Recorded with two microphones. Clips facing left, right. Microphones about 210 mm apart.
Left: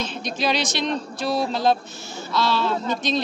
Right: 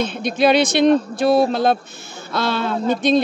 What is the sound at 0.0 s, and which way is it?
A man's voice, 55° right (ahead or behind).